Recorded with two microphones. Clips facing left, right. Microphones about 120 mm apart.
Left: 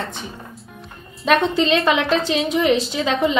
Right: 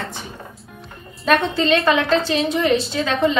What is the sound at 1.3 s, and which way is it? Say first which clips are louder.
A woman's voice: even; 20° left (ahead or behind).